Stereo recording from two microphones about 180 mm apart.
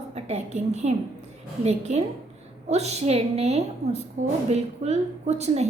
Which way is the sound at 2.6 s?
35° right (ahead or behind).